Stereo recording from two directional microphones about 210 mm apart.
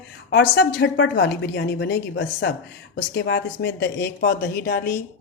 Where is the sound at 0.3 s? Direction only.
55° left (ahead or behind).